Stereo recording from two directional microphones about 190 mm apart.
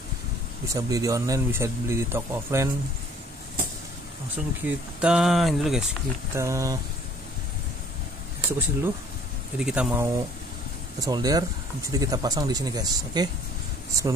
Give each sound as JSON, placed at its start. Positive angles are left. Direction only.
{"t": 0.7, "sound": "speech", "side_deg": -20}
{"t": 4.6, "sound": "speech", "side_deg": -5}
{"t": 6.3, "sound": "speech", "side_deg": -15}
{"t": 8.5, "sound": "speech", "side_deg": -10}
{"t": 11.0, "sound": "speech", "side_deg": -20}